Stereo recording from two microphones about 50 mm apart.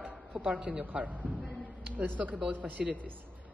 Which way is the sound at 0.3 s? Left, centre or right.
Right.